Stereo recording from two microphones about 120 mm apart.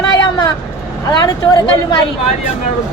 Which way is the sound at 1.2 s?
35° left (ahead or behind).